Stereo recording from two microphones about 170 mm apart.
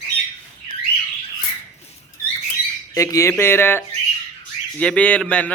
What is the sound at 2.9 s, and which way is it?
A man's voice, 20° left (ahead or behind).